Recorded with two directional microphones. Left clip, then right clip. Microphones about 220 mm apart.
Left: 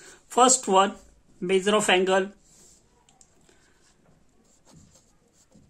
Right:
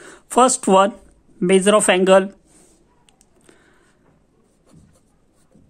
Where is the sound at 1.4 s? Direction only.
45° right (ahead or behind).